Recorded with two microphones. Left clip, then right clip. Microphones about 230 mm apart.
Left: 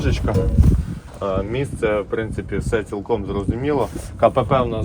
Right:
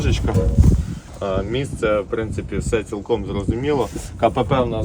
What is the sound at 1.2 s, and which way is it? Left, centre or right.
Speech, centre.